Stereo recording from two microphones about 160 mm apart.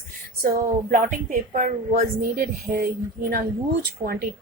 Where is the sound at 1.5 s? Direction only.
55° right (ahead or behind).